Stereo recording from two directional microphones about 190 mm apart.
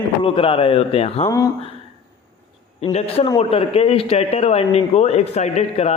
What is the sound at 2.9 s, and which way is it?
A man's voice, 30° left (ahead or behind).